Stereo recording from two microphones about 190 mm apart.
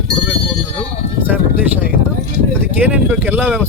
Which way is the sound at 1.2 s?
10° right (ahead or behind).